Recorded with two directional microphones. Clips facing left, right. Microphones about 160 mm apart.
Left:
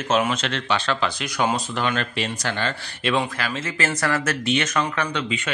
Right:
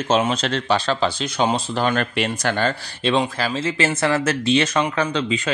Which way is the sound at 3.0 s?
30° right (ahead or behind).